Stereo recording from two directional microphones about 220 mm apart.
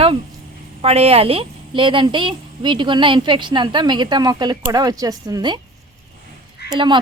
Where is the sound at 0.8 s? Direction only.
25° right (ahead or behind).